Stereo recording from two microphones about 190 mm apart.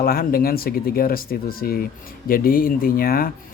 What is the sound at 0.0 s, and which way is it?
Speech, 50° left (ahead or behind).